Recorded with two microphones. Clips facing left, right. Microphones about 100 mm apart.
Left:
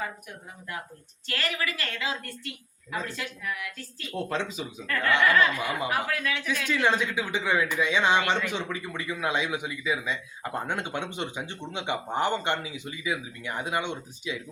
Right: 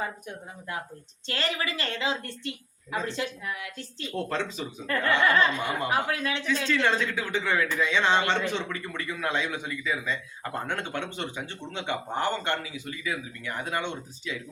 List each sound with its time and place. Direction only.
0.0 s a woman's voice: 25° right (ahead or behind)
4.1 s a man's voice: 10° left (ahead or behind)
4.9 s a woman's voice: 25° right (ahead or behind)
6.7 s a man's voice: 15° left (ahead or behind)